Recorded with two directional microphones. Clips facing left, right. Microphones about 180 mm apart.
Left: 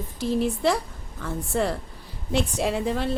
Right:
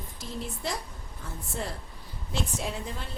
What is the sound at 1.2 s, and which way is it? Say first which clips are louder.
A woman's voice: left 11 dB; 90° left.